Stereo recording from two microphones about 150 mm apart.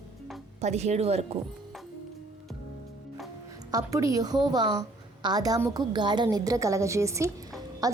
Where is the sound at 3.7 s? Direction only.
25° right (ahead or behind).